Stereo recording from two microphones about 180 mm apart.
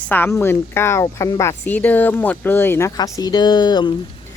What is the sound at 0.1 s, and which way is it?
A woman's voice, 10° left (ahead or behind).